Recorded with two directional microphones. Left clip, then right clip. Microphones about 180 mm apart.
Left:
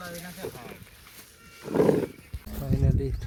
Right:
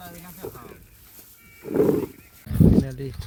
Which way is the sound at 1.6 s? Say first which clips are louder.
Right 2 dB; 75° right (ahead or behind).